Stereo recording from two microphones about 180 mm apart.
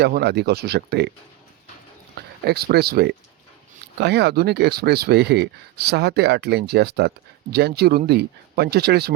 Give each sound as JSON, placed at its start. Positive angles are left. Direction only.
{"t": 0.0, "sound": "speech", "side_deg": -65}
{"t": 2.1, "sound": "speech", "side_deg": -60}